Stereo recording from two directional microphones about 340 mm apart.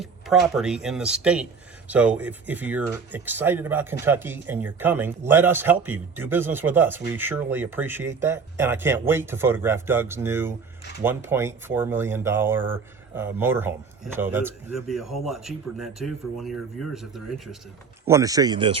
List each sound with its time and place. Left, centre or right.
0.0 s speech: centre